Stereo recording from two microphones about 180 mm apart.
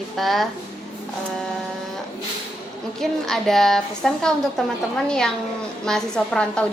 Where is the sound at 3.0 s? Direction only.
Centre (ahead or behind).